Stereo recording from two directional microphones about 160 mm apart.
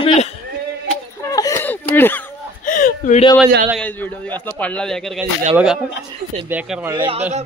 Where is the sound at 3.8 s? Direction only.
10° left (ahead or behind).